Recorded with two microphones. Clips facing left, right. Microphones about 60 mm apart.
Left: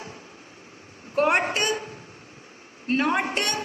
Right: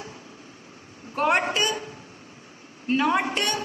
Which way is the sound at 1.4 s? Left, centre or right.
Left.